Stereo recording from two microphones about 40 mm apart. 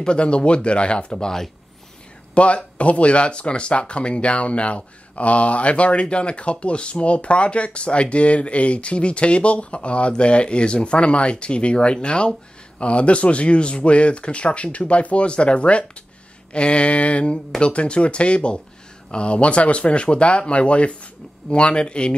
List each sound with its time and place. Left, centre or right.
0.0 s speech: left
2.3 s speech: left
16.5 s a sound: left
17.6 s speech: left